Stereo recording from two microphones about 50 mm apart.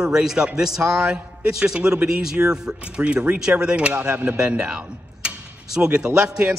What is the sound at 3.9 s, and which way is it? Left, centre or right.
Speech, right.